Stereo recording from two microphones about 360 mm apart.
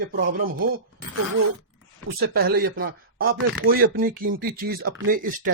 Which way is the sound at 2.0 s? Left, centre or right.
Right.